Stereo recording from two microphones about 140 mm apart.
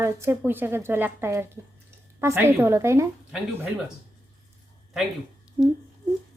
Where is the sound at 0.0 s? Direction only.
20° right (ahead or behind).